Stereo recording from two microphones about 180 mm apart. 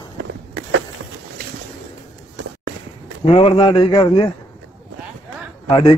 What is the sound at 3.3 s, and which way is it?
A man's voice, 30° left (ahead or behind).